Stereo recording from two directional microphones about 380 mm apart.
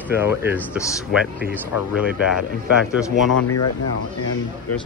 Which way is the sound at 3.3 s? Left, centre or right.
Left.